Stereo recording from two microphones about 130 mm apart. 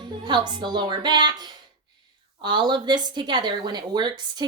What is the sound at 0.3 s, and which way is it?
Speech, 35° right (ahead or behind).